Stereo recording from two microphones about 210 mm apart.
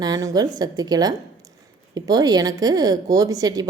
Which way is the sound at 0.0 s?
15° right (ahead or behind).